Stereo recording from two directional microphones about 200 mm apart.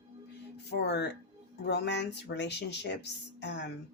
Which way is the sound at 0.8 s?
55° left (ahead or behind).